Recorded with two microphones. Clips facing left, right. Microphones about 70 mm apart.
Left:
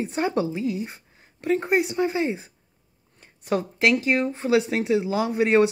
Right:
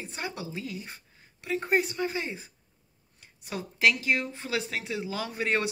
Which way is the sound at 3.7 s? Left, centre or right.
Left.